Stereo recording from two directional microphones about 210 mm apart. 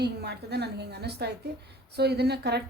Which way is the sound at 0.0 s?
50° right (ahead or behind).